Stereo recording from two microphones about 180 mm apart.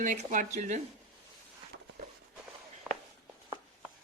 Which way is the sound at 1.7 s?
65° right (ahead or behind).